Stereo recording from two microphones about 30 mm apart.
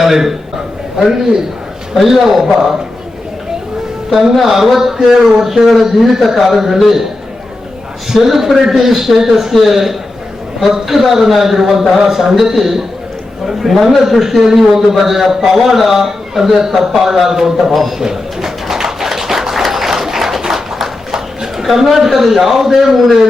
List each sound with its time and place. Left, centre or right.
0.0 s a man's voice: centre
1.0 s a man's voice: centre
2.0 s a man's voice: centre
4.4 s a man's voice: centre
8.1 s a man's voice: centre
17.7 s a man's voice: centre
18.0 s a sound: centre
21.6 s a man's voice: centre